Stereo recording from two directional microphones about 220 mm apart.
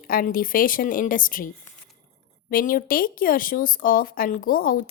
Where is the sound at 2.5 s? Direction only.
40° left (ahead or behind).